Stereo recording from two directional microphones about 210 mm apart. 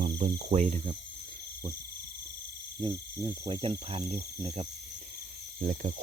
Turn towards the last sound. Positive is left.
turn(degrees=-45)  # may be behind; listen again after turning